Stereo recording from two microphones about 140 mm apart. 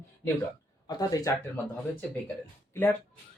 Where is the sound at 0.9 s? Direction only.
25° left (ahead or behind).